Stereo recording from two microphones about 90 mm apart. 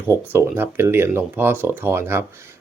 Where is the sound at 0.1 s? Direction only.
25° right (ahead or behind).